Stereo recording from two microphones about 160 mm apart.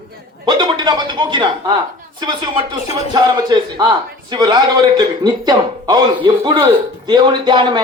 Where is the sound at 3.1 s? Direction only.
25° right (ahead or behind).